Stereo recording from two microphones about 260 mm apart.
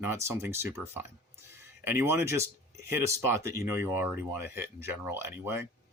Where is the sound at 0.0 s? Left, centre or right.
Centre.